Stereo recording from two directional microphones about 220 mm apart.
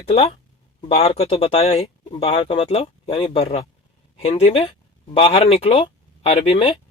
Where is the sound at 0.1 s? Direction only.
25° left (ahead or behind).